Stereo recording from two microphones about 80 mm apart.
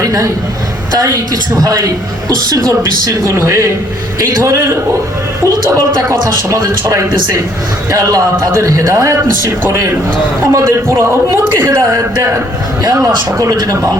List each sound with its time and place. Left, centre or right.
0.0 s a sound: right
0.9 s speech: right
11.6 s speech: right
12.8 s speech: right